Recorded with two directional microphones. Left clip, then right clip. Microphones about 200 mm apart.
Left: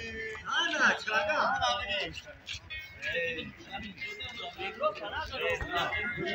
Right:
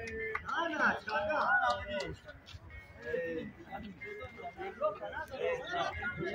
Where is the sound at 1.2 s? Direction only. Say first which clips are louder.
Left 2 dB; 25° right (ahead or behind).